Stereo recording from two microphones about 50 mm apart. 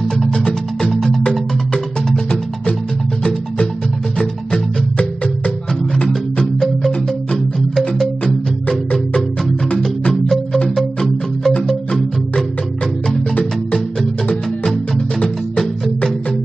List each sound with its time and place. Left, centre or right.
0.2 s music: centre
4.2 s music: left
6.3 s music: centre
8.6 s music: centre
14.3 s music: centre
15.1 s music: centre